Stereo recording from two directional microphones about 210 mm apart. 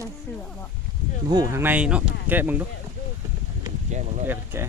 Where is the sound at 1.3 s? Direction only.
15° right (ahead or behind).